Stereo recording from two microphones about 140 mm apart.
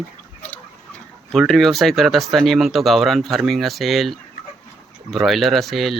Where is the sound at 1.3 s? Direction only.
Centre (ahead or behind).